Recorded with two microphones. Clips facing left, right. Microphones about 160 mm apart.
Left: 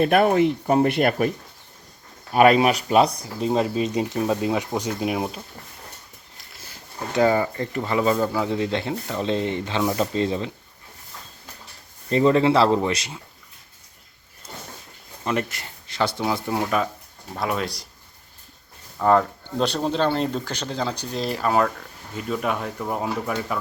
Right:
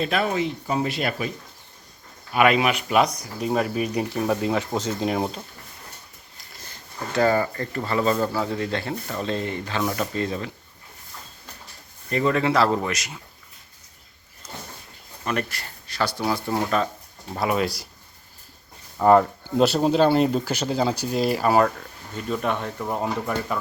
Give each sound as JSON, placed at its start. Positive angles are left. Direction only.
{"t": 0.0, "sound": "speech", "side_deg": 55}
{"t": 2.3, "sound": "speech", "side_deg": 40}
{"t": 6.5, "sound": "a sound", "side_deg": 5}
{"t": 7.1, "sound": "speech", "side_deg": 15}
{"t": 12.0, "sound": "speech", "side_deg": 25}
{"t": 15.2, "sound": "speech", "side_deg": 20}
{"t": 16.5, "sound": "speech", "side_deg": 10}
{"t": 17.3, "sound": "speech", "side_deg": -5}
{"t": 18.9, "sound": "speech", "side_deg": -5}